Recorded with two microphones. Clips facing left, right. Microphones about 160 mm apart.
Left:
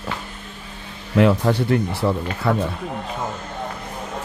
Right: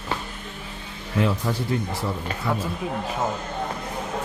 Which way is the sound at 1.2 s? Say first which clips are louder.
Left 7 dB; 70° left (ahead or behind).